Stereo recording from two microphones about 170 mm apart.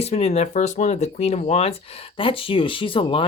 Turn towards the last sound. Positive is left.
turn(degrees=30)  # may be behind; listen again after turning